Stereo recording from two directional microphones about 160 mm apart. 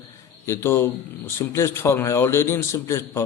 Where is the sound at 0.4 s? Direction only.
15° left (ahead or behind).